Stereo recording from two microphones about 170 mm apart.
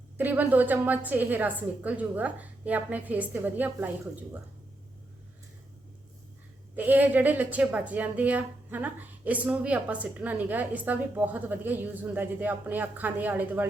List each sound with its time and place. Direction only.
0.2 s a woman's voice: 10° right (ahead or behind)
6.7 s a woman's voice: 10° right (ahead or behind)